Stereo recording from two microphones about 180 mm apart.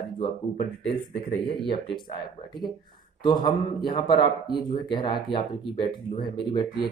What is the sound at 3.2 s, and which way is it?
Speech, 25° left (ahead or behind).